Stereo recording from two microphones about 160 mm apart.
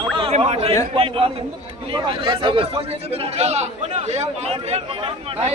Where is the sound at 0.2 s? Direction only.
40° right (ahead or behind).